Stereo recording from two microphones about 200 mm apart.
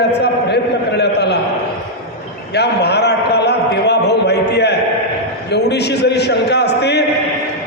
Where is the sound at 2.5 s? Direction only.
55° left (ahead or behind).